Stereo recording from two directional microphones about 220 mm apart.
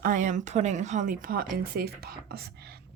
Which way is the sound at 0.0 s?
35° right (ahead or behind).